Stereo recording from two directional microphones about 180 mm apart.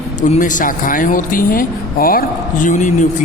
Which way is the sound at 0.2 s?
45° left (ahead or behind).